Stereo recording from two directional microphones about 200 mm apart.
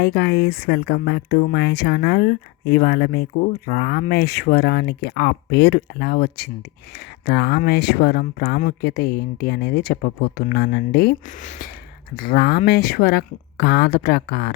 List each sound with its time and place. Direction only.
0.0 s speech: 55° left (ahead or behind)